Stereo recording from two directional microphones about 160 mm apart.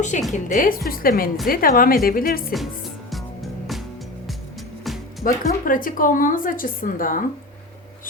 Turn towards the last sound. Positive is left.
turn(degrees=60)  # may be behind; listen again after turning